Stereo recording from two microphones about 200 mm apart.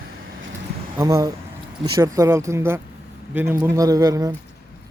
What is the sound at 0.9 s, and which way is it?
Speech, 15° right (ahead or behind).